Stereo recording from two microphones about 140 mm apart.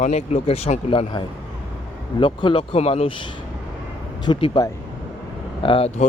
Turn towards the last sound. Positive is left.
turn(degrees=40)  # may be behind; listen again after turning